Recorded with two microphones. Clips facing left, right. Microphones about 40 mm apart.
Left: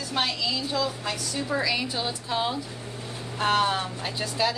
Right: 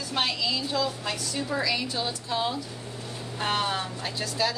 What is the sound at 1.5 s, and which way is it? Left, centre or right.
A woman's voice, centre.